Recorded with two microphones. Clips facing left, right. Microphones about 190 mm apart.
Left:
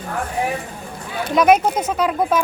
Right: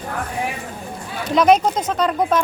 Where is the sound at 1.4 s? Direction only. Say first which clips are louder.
Even; 10° left (ahead or behind).